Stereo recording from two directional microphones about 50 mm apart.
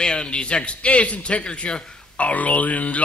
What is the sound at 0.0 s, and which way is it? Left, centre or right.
A man's voice, centre.